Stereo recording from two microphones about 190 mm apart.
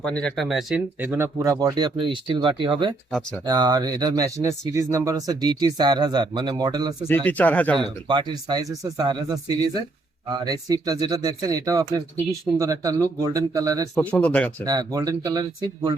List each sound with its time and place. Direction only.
0.0 s speech: 5° left (ahead or behind); by 6.9 s 20° right (ahead or behind)
7.3 s speech: 10° left (ahead or behind)
7.8 s speech: 25° right (ahead or behind)
13.9 s speech: 10° left (ahead or behind)
14.6 s speech: 20° right (ahead or behind)